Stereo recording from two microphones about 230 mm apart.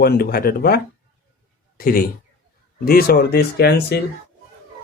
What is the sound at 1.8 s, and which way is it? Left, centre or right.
Speech, left.